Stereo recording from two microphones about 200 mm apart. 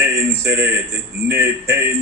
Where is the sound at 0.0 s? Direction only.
15° right (ahead or behind).